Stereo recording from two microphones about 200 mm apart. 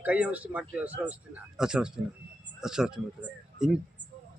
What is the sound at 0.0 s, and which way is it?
A man's voice, 5° right (ahead or behind).